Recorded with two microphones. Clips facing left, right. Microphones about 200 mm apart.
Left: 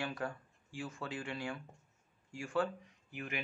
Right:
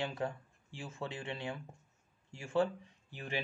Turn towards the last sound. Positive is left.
turn(degrees=-30)  # may be behind; listen again after turning